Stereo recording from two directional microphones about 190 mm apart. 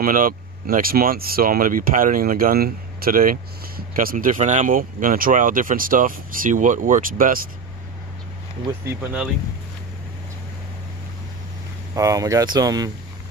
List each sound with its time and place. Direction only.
0.0 s speech: 45° right (ahead or behind)
8.8 s speech: 5° right (ahead or behind)
11.9 s speech: 15° right (ahead or behind)